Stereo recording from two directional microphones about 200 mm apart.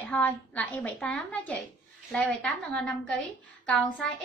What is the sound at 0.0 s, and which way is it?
A woman's voice, 5° left (ahead or behind).